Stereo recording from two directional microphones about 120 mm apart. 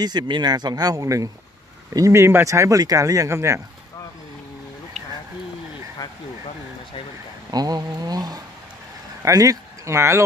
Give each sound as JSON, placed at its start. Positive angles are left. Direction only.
{"t": 0.0, "sound": "speech", "side_deg": -35}
{"t": 7.5, "sound": "speech", "side_deg": -35}